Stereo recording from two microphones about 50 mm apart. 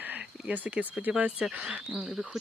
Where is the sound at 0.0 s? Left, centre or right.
Right.